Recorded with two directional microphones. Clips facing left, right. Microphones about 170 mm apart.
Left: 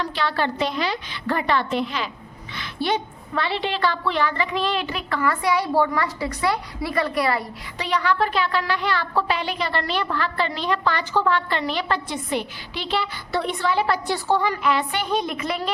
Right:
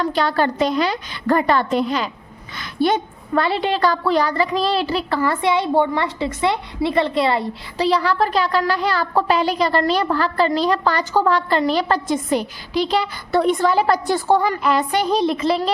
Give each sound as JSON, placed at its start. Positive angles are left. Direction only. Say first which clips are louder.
{"t": 0.0, "sound": "a woman's voice", "louder": "right 5 dB", "side_deg": -45}